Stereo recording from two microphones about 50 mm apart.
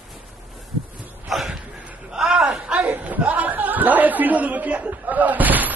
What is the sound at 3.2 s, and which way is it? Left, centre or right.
Chuckle, right.